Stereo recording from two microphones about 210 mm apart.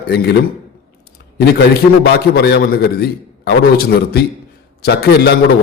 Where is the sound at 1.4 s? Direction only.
50° left (ahead or behind).